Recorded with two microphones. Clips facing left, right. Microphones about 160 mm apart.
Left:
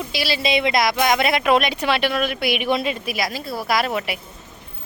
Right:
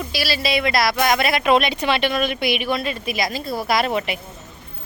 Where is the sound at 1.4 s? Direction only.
5° left (ahead or behind).